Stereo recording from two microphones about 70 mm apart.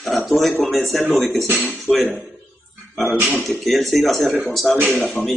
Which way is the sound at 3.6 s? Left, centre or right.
Centre.